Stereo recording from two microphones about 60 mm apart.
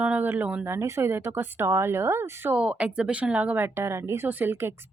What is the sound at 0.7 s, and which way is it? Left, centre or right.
Speech, right.